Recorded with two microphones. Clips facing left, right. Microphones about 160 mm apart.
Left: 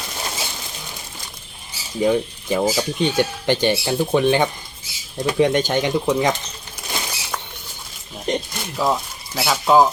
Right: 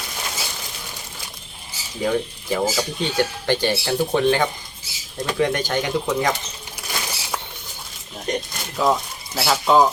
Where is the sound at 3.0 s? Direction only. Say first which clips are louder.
Left 3 dB; 20° left (ahead or behind).